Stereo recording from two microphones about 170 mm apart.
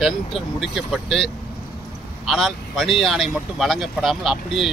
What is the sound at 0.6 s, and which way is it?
Speech, centre (ahead or behind).